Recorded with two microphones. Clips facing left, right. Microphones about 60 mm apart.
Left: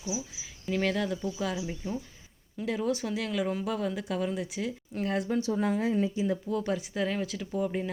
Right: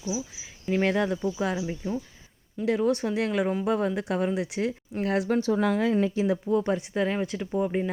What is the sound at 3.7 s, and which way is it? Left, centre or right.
Speech, right.